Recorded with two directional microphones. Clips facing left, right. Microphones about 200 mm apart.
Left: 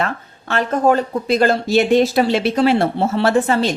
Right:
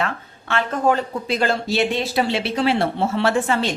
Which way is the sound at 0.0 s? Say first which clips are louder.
Left 3 dB; 40° left (ahead or behind).